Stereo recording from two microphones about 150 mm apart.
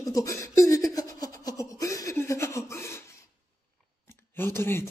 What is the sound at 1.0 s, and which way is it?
Laughter, 25° left (ahead or behind).